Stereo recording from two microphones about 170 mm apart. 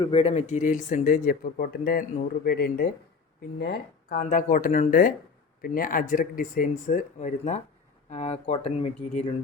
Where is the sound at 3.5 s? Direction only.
80° left.